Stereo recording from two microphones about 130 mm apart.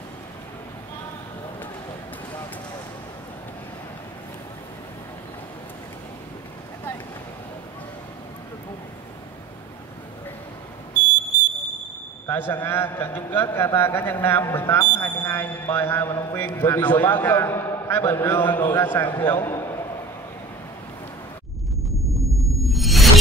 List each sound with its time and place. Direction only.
12.3 s a man's voice: 15° left (ahead or behind)
16.5 s a man's voice: 15° left (ahead or behind)
22.6 s a sound: centre (ahead or behind)